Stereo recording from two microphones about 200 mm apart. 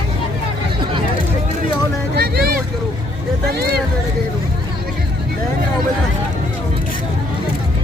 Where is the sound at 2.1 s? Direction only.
50° right (ahead or behind).